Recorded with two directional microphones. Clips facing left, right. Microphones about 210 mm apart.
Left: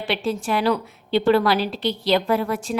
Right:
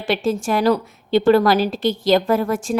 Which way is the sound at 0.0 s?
45° right (ahead or behind).